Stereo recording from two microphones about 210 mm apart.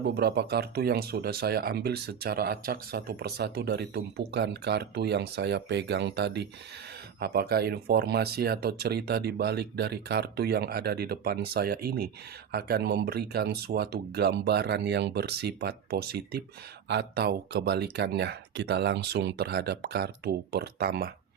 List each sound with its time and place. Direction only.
0.0 s speech: 50° right (ahead or behind)